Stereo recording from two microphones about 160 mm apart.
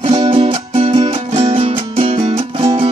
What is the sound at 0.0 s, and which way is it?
Music, 35° right (ahead or behind).